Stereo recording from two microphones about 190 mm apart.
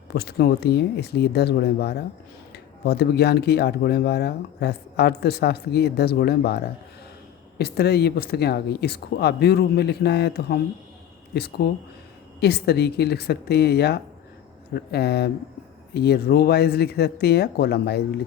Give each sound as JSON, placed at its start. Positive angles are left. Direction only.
{"t": 0.1, "sound": "speech", "side_deg": 55}